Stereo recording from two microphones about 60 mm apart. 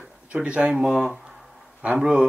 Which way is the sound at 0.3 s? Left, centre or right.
Right.